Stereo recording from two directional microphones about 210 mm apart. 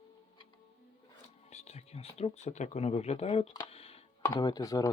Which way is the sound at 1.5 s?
30° left (ahead or behind).